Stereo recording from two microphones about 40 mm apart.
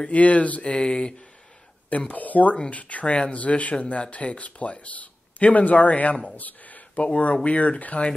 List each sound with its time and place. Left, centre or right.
0.0 s speech: left
0.7 s speech: left
1.9 s speech: left